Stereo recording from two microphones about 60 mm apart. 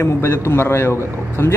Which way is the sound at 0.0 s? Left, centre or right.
Left.